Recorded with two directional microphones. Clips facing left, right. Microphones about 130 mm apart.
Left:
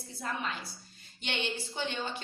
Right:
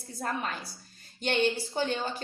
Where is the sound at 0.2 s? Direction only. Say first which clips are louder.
Right 3 dB; 45° right (ahead or behind).